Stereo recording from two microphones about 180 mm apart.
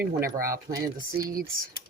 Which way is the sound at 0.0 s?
55° right (ahead or behind).